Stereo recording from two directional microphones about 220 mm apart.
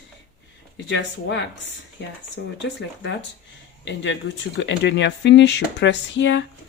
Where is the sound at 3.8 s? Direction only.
55° left (ahead or behind).